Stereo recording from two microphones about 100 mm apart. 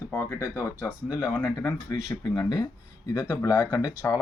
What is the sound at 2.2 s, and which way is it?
Speech, 45° left (ahead or behind).